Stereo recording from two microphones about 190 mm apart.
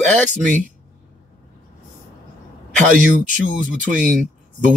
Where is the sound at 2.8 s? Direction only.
40° right (ahead or behind).